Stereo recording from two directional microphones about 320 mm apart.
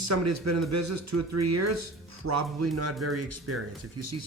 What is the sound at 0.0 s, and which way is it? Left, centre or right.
Speech, right.